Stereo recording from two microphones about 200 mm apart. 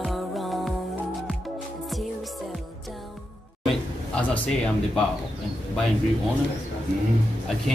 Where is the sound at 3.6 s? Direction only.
5° left (ahead or behind).